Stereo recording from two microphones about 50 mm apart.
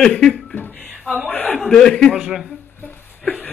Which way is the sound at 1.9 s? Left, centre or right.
Centre.